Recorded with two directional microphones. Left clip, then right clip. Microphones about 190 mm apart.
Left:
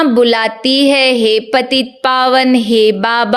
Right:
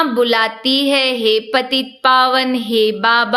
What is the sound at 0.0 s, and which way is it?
Speech, 35° left (ahead or behind).